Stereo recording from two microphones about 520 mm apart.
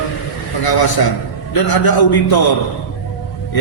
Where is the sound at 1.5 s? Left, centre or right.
Left.